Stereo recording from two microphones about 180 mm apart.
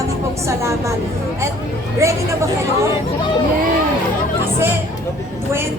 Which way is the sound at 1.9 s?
15° right (ahead or behind).